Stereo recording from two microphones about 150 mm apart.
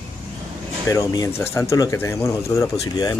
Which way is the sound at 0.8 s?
20° left (ahead or behind).